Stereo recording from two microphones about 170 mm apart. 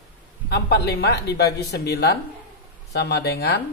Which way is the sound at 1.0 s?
75° left (ahead or behind).